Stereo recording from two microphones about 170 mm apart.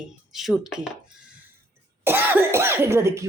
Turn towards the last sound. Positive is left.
turn(degrees=-15)  # may be behind; listen again after turning